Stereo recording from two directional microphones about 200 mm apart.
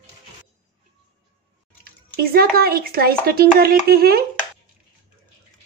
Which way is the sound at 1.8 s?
50° right (ahead or behind).